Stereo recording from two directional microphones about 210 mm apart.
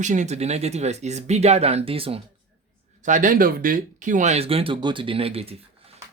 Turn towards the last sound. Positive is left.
turn(degrees=-30)  # may be behind; listen again after turning